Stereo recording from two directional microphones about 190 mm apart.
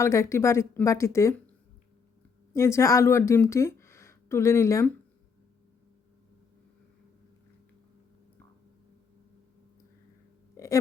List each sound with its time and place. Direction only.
0.0 s speech: 15° left (ahead or behind)
2.6 s a woman's voice: 15° left (ahead or behind)
10.6 s burping: 15° left (ahead or behind)